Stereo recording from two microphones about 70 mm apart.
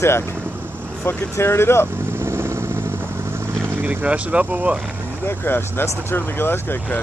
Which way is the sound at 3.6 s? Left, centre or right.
Right.